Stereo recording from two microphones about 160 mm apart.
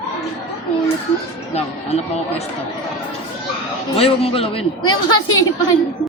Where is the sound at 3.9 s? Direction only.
35° left (ahead or behind).